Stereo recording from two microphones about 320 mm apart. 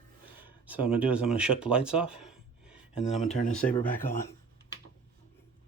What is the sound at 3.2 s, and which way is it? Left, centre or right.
Speech, left.